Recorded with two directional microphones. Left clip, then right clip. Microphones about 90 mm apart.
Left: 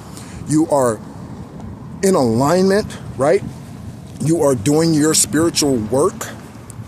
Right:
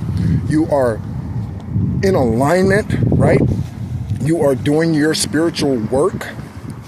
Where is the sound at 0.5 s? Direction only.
55° left (ahead or behind).